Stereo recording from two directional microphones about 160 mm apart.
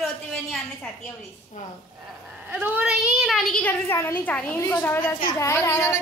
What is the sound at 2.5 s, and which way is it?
Speech, 10° right (ahead or behind).